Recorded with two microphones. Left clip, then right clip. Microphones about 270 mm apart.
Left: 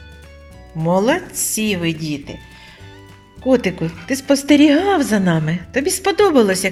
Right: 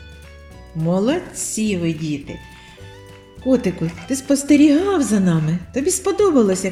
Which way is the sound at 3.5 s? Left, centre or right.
Left.